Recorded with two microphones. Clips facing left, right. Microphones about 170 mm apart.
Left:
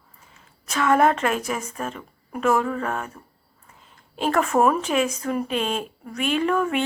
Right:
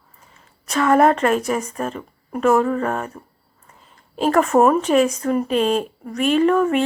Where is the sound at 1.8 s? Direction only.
35° right (ahead or behind).